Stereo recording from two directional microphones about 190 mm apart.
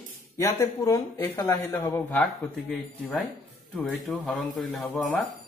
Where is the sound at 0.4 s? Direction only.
15° left (ahead or behind).